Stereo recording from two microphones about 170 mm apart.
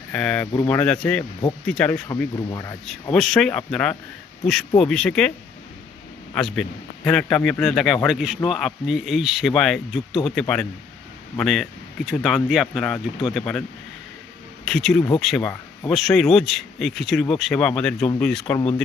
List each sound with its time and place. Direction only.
0.1 s speech: 5° left (ahead or behind)
2.0 s speech: 20° left (ahead or behind)
2.8 s speech: centre (ahead or behind)
6.3 s speech: 5° left (ahead or behind)